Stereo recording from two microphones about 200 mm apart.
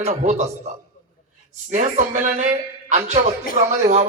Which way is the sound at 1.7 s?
40° right (ahead or behind).